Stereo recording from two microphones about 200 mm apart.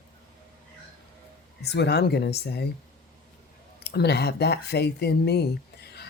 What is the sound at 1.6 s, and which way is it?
Speech, 55° left (ahead or behind).